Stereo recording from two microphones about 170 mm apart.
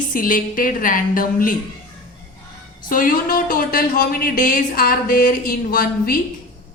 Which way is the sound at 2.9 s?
55° left (ahead or behind).